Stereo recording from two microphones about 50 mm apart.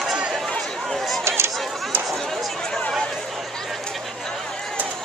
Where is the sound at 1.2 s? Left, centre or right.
Right.